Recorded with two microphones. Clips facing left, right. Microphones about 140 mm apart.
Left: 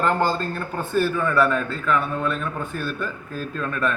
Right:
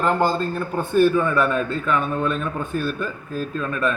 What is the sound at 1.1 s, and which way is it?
Speech, 15° right (ahead or behind).